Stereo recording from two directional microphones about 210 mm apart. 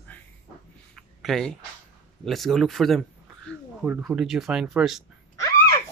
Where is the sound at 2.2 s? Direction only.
Centre (ahead or behind).